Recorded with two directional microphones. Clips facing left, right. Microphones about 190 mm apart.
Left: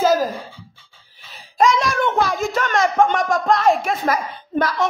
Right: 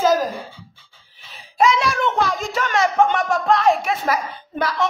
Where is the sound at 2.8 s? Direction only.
45° left (ahead or behind).